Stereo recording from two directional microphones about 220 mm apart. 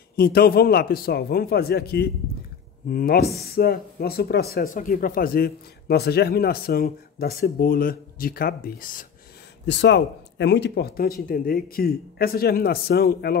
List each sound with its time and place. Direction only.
0.1 s speech: 45° left (ahead or behind)
9.7 s speech: 50° left (ahead or behind)